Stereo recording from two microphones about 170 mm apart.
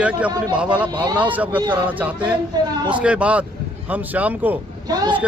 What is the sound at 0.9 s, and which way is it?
Speech, 25° right (ahead or behind).